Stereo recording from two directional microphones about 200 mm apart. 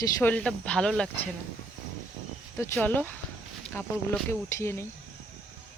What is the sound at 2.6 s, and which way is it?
Speech, 10° left (ahead or behind).